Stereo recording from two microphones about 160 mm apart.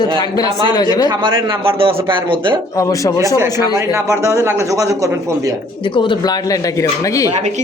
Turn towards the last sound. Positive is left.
turn(degrees=20)  # may be behind; listen again after turning